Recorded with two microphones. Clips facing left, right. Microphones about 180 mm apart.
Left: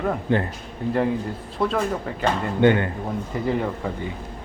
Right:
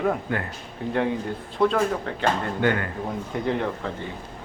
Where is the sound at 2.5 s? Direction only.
25° left (ahead or behind).